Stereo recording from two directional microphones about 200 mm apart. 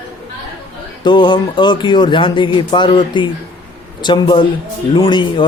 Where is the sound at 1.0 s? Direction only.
25° left (ahead or behind).